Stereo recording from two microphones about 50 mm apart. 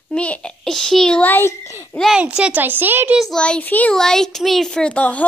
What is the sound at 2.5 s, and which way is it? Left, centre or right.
Speech, right.